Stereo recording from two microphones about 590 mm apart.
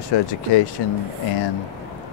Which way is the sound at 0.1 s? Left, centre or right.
Left.